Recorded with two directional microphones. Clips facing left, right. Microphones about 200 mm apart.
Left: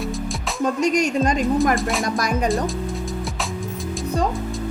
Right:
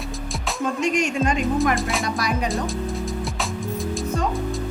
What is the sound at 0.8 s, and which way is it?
Speech, 40° left (ahead or behind).